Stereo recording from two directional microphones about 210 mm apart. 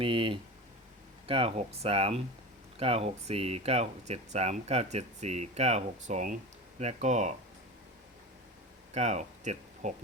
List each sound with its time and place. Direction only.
0.0 s speech: 25° right (ahead or behind)
8.9 s speech: 35° right (ahead or behind)